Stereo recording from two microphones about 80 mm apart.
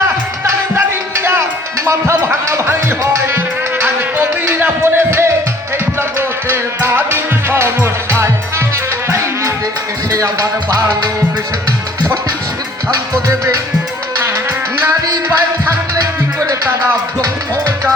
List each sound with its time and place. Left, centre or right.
1.1 s music: right
12.9 s music: right
14.8 s music: right
15.3 s music: right